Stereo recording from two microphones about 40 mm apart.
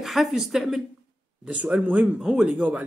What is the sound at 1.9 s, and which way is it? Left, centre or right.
Speech, right.